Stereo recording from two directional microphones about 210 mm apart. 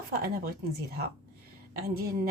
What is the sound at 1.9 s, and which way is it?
Speech, 45° right (ahead or behind).